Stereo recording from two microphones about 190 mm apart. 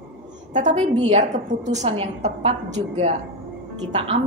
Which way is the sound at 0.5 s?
40° right (ahead or behind).